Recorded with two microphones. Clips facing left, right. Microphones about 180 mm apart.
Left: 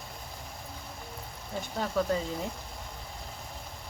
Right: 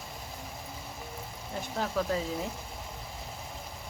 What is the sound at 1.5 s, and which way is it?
Speech, centre (ahead or behind).